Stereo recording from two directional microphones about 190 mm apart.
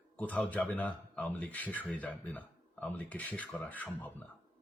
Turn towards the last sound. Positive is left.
turn(degrees=10)  # may be behind; listen again after turning